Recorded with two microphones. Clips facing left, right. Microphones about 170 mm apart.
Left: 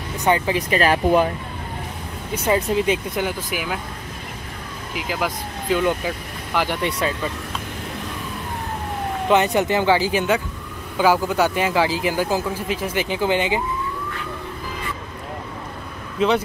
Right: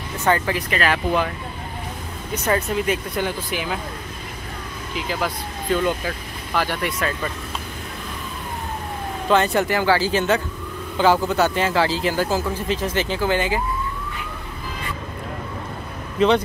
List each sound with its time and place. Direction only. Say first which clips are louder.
0.2 s speech: left 1 dB; 15° left (ahead or behind)
0.7 s speech: left 5 dB; 35° left (ahead or behind)
2.3 s speech: left 2 dB; 10° left (ahead or behind)
4.9 s speech: even; 10° left (ahead or behind)
9.3 s speech: left 1 dB; 20° left (ahead or behind)